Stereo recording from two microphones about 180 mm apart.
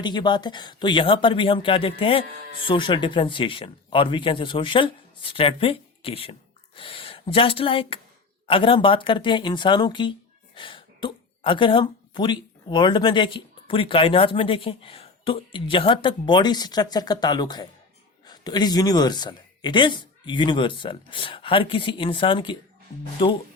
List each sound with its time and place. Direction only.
0.0 s speech: 25° left (ahead or behind)